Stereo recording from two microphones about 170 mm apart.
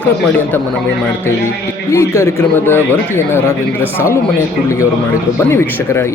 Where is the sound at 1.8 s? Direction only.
15° left (ahead or behind).